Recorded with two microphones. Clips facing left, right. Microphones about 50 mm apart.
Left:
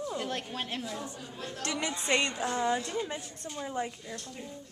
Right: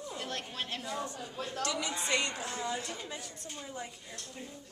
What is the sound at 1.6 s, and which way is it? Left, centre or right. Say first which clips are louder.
Speech: left 4 dB; left.